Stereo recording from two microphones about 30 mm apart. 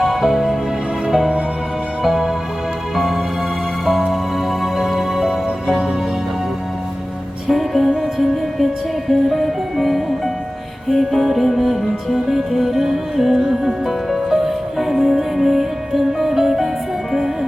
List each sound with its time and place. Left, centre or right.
0.0 s music: centre
2.0 s music: centre
4.6 s music: centre
5.6 s music: right
7.4 s music: centre